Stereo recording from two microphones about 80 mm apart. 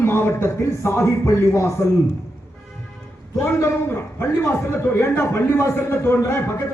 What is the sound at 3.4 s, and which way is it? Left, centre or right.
A man's voice, left.